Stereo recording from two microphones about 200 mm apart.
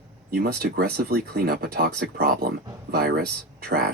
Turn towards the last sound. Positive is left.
turn(degrees=-50)  # may be behind; listen again after turning